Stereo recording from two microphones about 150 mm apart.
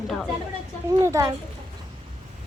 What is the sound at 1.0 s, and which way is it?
Speech, 20° right (ahead or behind).